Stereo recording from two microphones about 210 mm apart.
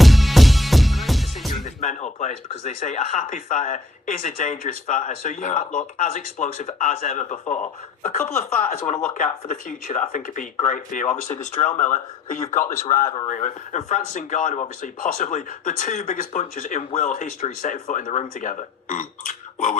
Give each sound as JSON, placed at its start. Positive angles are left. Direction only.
{"t": 0.0, "sound": "music", "side_deg": 0}
{"t": 1.6, "sound": "speech", "side_deg": 35}
{"t": 9.1, "sound": "speech", "side_deg": 40}